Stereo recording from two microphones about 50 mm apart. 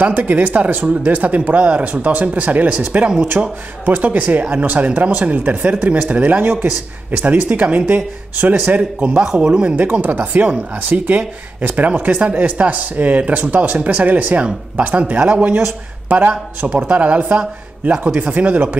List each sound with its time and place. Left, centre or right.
0.0 s speech: right
9.2 s speech: centre
9.8 s speech: right